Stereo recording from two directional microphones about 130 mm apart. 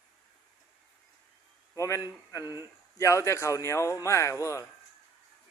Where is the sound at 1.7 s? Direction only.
25° left (ahead or behind).